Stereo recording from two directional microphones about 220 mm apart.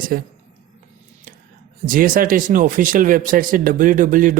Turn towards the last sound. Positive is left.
turn(degrees=-35)  # may be behind; listen again after turning